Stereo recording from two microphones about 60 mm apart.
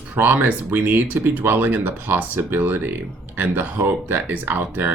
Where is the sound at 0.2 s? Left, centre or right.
Right.